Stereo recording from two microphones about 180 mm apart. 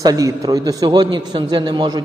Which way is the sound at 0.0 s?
20° right (ahead or behind).